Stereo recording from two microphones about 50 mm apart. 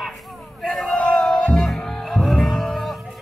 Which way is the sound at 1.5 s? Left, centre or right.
Centre.